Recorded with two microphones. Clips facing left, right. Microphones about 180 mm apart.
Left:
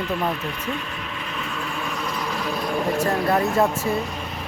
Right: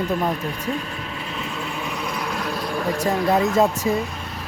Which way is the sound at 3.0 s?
15° right (ahead or behind).